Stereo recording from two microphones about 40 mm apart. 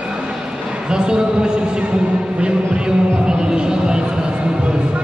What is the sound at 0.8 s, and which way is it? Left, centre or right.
Speech, right.